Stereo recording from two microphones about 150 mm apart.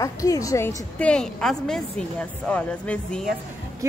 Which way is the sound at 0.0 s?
20° left (ahead or behind).